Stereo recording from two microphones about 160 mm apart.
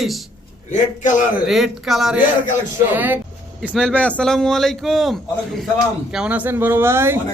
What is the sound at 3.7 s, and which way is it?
A man's voice, 5° left (ahead or behind).